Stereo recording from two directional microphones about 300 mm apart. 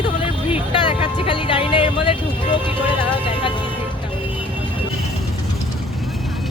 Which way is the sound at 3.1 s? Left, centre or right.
Centre.